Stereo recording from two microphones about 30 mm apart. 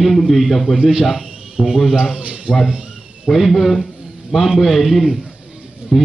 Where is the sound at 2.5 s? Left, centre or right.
Right.